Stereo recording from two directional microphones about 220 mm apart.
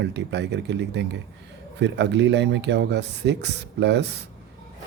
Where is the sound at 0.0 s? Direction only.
50° right (ahead or behind).